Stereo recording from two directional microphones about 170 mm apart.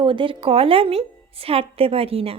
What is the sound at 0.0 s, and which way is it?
A woman's voice, 30° right (ahead or behind).